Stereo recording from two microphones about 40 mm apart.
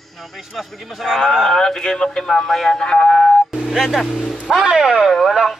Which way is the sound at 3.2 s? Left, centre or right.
Centre.